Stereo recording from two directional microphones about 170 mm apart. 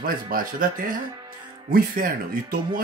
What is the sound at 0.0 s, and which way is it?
Speech, 55° right (ahead or behind).